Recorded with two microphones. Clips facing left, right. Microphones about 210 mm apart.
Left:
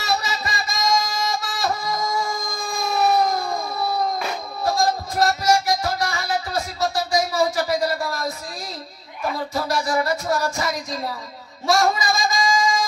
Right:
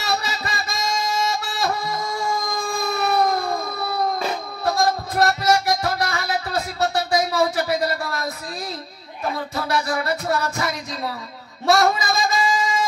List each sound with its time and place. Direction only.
0.0 s music: 60° right (ahead or behind)
4.6 s music: 60° right (ahead or behind)
9.5 s music: 60° right (ahead or behind)
11.6 s a sound: 60° right (ahead or behind)